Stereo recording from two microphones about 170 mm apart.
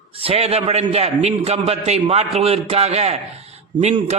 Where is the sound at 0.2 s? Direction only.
35° right (ahead or behind).